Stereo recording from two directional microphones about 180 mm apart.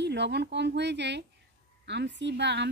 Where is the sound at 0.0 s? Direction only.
70° right (ahead or behind).